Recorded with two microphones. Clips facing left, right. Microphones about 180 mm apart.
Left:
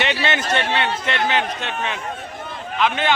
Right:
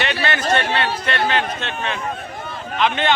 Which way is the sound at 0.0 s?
15° left (ahead or behind).